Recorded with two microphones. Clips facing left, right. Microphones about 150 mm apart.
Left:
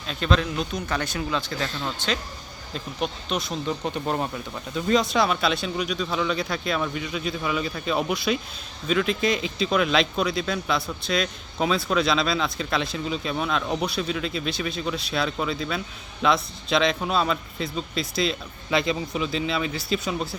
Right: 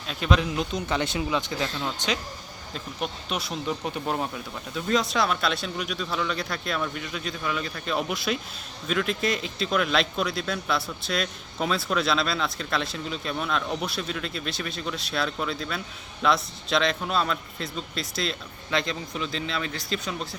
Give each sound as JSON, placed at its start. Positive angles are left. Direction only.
{"t": 0.1, "sound": "speech", "side_deg": -10}
{"t": 2.7, "sound": "speech", "side_deg": -5}